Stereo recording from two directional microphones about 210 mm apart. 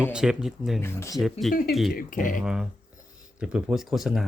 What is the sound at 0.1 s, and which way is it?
Speech, 5° right (ahead or behind).